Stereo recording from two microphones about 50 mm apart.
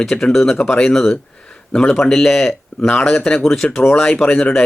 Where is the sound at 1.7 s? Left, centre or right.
Left.